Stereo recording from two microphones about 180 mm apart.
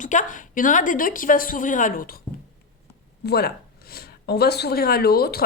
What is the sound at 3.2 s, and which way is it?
Speech, 65° left (ahead or behind).